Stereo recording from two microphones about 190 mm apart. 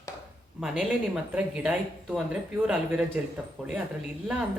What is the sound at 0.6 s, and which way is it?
Speech, centre (ahead or behind).